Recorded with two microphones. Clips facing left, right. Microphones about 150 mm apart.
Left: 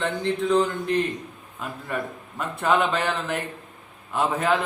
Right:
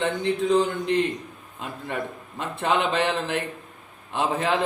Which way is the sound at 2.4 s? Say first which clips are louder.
Left 2 dB; 25° right (ahead or behind).